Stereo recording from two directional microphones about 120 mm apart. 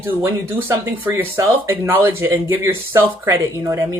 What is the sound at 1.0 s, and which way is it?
Speech, 20° right (ahead or behind).